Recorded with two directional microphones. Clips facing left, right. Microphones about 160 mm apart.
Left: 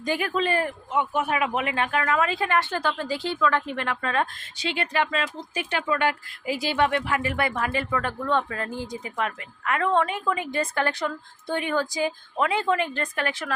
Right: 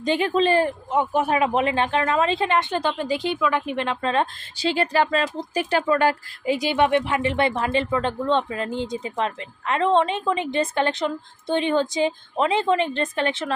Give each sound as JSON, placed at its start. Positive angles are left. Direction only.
{"t": 0.0, "sound": "speech", "side_deg": -25}
{"t": 6.5, "sound": "speech", "side_deg": -20}